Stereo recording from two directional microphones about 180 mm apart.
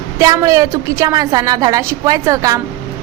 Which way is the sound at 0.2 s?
20° right (ahead or behind).